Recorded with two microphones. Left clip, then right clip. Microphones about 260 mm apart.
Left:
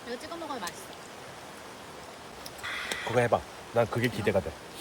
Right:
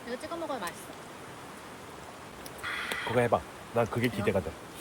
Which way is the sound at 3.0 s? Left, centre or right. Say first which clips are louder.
Left 1 dB; left.